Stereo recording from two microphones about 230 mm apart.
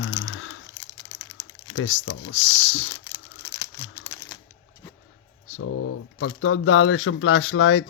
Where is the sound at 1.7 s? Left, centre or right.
Left.